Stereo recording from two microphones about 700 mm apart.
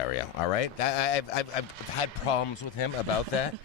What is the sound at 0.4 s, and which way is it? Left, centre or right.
Speech, left.